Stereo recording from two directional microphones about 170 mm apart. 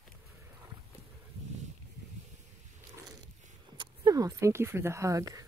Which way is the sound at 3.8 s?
20° right (ahead or behind).